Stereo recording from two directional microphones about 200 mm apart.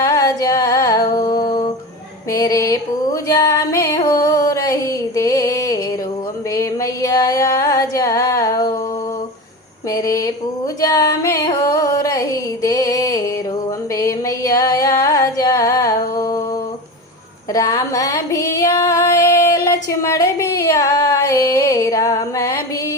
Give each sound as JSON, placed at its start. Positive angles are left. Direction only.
{"t": 0.0, "sound": "humming", "side_deg": 15}
{"t": 2.3, "sound": "music", "side_deg": 20}
{"t": 6.5, "sound": "a sound", "side_deg": 15}
{"t": 9.9, "sound": "a sound", "side_deg": 15}
{"t": 10.8, "sound": "music", "side_deg": 20}
{"t": 17.5, "sound": "female singing", "side_deg": 15}